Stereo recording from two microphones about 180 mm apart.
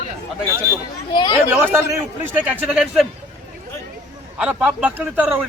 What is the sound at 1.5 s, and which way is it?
A man's voice, 10° right (ahead or behind).